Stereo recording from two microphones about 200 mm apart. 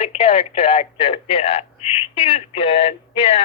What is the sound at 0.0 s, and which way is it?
Speech, 30° left (ahead or behind).